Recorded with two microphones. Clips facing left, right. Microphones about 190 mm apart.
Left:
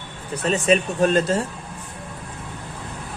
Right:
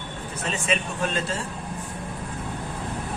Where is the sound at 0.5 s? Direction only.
40° left (ahead or behind).